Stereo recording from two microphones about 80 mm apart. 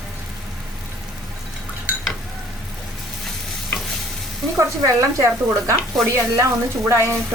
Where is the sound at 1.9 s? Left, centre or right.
Centre.